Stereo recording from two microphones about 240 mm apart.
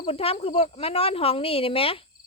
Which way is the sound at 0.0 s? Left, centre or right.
Left.